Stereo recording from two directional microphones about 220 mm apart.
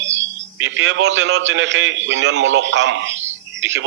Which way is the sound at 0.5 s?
55° right (ahead or behind).